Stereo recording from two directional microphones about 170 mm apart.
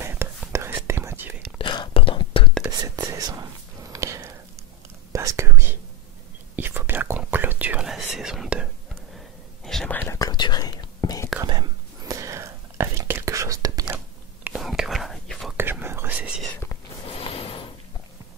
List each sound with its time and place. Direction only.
0.0 s whispering: 15° right (ahead or behind)
1.6 s whispering: 30° left (ahead or behind)
2.8 s whispering: 20° right (ahead or behind)
3.9 s a sound: 20° right (ahead or behind)
5.1 s whispering: 20° right (ahead or behind)
9.7 s whispering: 5° left (ahead or behind); by 11.2 s 20° left (ahead or behind)
12.1 s whispering: 20° right (ahead or behind)
13.9 s whispering: 5° right (ahead or behind)
15.5 s whispering: 10° right (ahead or behind)
17.0 s a sound: 35° left (ahead or behind)